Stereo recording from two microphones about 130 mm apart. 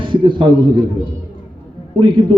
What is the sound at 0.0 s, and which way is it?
Speech, 40° right (ahead or behind).